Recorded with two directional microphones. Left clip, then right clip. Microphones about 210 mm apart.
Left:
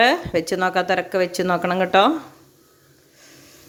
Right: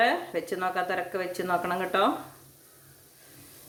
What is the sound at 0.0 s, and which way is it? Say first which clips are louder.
A woman's voice: left 8 dB; 45° left (ahead or behind).